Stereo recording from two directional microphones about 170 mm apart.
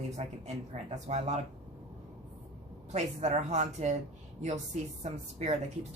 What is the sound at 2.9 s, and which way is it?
Speech, 40° right (ahead or behind).